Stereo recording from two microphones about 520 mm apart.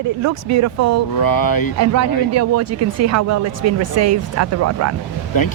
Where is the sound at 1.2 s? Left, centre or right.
Left.